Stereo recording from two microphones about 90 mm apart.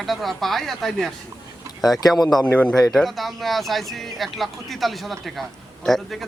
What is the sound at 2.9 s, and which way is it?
Speech, centre (ahead or behind).